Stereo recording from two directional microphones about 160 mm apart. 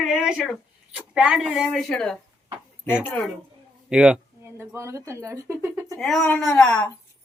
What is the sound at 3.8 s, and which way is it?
Speech, 5° right (ahead or behind).